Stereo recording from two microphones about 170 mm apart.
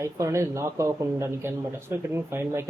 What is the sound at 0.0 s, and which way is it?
Speech, 15° right (ahead or behind).